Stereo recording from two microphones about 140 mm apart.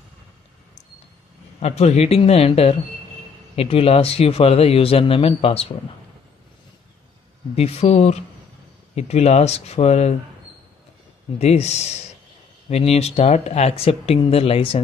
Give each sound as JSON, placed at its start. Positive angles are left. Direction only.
{"t": 1.6, "sound": "speech", "side_deg": 50}
{"t": 7.5, "sound": "speech", "side_deg": 45}
{"t": 11.3, "sound": "speech", "side_deg": 50}